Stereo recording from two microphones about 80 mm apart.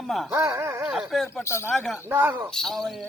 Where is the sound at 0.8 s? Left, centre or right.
Centre.